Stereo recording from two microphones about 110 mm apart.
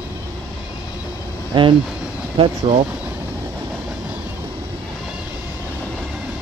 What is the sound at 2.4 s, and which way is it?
Speech, 60° right (ahead or behind).